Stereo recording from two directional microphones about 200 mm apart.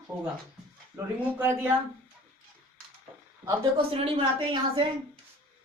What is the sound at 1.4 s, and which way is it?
Speech, 10° right (ahead or behind).